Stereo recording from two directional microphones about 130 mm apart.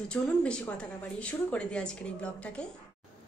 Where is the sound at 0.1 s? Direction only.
10° left (ahead or behind).